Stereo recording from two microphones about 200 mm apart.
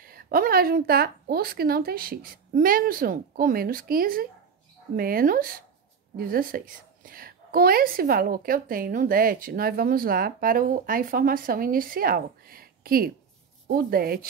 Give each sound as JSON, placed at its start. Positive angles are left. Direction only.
{"t": 0.0, "sound": "a woman's voice", "side_deg": -45}